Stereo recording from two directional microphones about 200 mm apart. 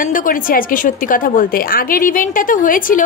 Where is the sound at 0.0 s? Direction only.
40° left (ahead or behind).